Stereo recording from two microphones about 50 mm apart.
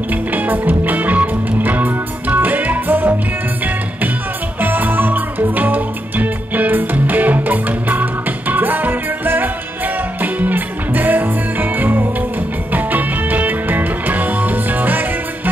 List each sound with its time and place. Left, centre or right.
0.1 s music: right
4.6 s music: right